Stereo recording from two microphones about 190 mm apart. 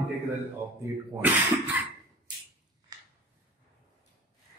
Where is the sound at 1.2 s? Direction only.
10° right (ahead or behind).